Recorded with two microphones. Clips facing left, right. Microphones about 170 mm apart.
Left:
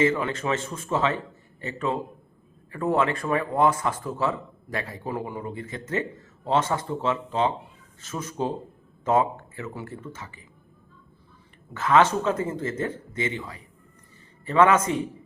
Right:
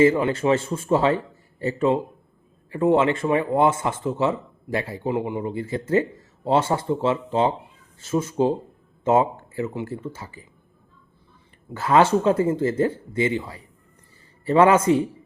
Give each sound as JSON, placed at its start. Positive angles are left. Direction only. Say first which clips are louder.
{"t": 0.0, "sound": "a man's voice", "louder": "right 6 dB", "side_deg": -30}
{"t": 11.7, "sound": "speech", "louder": "right 3 dB", "side_deg": -30}